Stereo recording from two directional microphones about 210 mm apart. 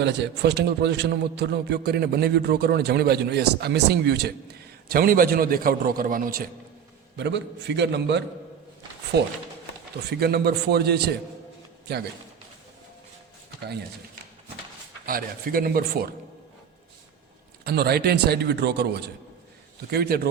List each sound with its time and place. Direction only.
0.0 s a man's voice: 55° right (ahead or behind)
7.2 s a man's voice: 55° right (ahead or behind)
15.0 s a man's voice: 45° right (ahead or behind)
17.6 s a man's voice: 50° right (ahead or behind)